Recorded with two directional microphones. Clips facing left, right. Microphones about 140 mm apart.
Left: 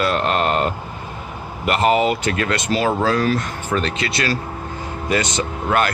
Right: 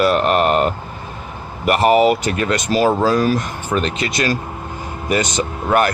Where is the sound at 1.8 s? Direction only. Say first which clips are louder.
Right 4 dB; 10° right (ahead or behind).